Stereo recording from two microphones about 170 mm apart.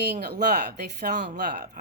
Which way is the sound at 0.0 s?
70° right (ahead or behind).